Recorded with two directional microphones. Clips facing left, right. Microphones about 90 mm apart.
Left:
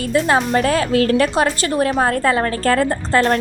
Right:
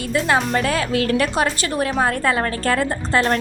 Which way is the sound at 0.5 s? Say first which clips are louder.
Left 4 dB; 35° left (ahead or behind).